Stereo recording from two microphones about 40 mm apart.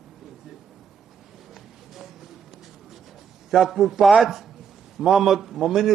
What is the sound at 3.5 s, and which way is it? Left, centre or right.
A man's voice, centre.